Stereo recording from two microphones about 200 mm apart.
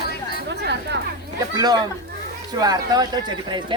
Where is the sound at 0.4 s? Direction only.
60° right (ahead or behind).